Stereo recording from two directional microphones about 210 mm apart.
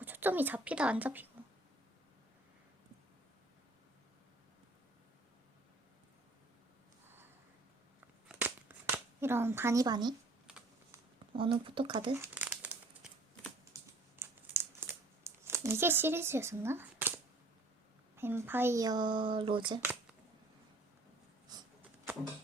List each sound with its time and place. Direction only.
0.0 s a woman's voice: 10° right (ahead or behind)
8.3 s a sound: 10° right (ahead or behind)
10.9 s speech: 20° right (ahead or behind)
12.1 s crumpling: 10° right (ahead or behind)
18.2 s speech: 10° right (ahead or behind)
21.5 s a sound: 20° right (ahead or behind)